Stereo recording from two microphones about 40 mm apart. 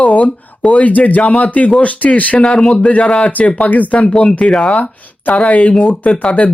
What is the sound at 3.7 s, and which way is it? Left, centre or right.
Speech, left.